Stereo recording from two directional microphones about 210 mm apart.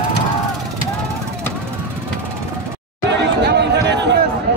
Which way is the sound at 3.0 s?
55° right (ahead or behind).